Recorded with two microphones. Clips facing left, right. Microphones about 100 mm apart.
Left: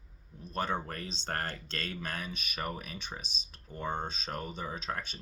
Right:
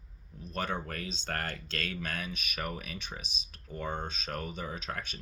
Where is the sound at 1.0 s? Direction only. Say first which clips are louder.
Right 2 dB; 50° right (ahead or behind).